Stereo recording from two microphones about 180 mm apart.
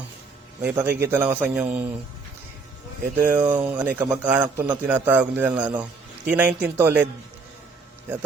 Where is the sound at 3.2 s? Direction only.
10° right (ahead or behind).